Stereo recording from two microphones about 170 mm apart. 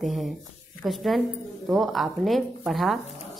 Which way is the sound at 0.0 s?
Centre (ahead or behind).